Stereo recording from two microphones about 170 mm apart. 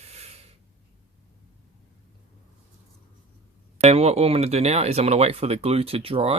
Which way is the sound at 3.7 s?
40° right (ahead or behind).